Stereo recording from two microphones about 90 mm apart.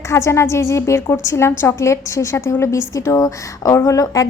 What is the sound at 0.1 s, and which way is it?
A woman's voice, 30° left (ahead or behind).